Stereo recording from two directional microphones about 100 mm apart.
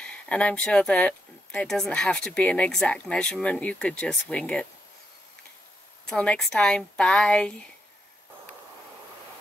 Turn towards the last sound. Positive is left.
turn(degrees=10)  # may be behind; listen again after turning